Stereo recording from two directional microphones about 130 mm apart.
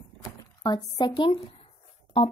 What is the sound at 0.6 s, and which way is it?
Speech, 35° left (ahead or behind).